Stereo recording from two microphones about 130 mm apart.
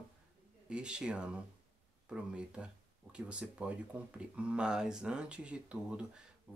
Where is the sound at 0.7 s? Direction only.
5° right (ahead or behind).